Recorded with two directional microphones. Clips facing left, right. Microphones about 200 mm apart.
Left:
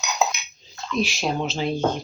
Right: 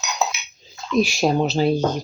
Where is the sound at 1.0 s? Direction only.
45° right (ahead or behind).